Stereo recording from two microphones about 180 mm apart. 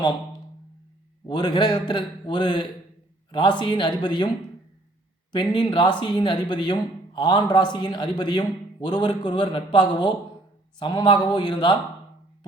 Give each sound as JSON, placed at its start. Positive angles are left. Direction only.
{"t": 1.3, "sound": "speech", "side_deg": 25}
{"t": 5.3, "sound": "speech", "side_deg": 25}